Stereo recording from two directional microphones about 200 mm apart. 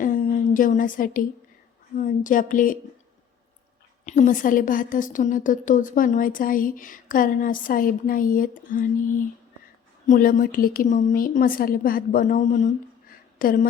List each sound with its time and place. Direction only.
0.0 s a sound: 40° left (ahead or behind)
2.0 s speech: 40° left (ahead or behind)
4.0 s a woman's voice: 35° left (ahead or behind)